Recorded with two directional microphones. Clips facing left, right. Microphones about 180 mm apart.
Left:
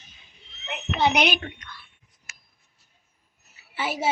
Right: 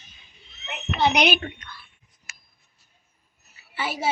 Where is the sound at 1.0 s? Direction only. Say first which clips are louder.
Right 1 dB; 10° left (ahead or behind).